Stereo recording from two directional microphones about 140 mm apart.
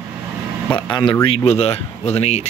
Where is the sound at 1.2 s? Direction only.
45° left (ahead or behind).